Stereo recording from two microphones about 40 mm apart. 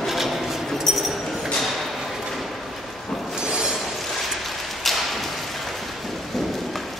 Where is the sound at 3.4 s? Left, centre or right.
Centre.